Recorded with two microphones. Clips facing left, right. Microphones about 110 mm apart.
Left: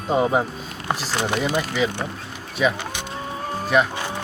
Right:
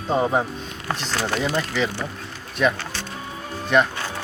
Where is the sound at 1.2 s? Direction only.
15° left (ahead or behind).